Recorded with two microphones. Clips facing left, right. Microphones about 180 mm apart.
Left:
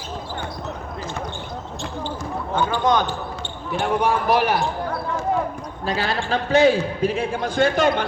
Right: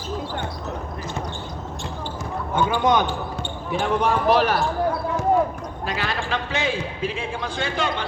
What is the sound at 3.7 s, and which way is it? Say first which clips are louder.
Speech: left 1 dB; 5° left (ahead or behind).